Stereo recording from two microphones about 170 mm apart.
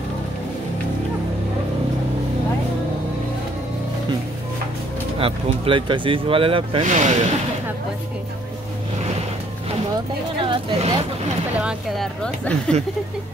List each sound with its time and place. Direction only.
5.2 s speech: 30° right (ahead or behind)
6.8 s speech: 45° right (ahead or behind)
10.4 s speech: 30° right (ahead or behind)
11.6 s speech: centre (ahead or behind)